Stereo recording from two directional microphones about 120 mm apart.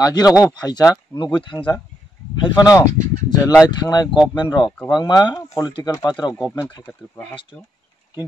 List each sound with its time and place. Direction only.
0.0 s speech: 35° left (ahead or behind)
6.9 s speech: 15° left (ahead or behind)